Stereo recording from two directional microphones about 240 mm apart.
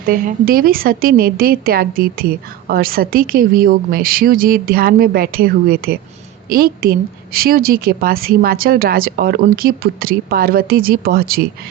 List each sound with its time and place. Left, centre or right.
0.0 s a woman's voice: right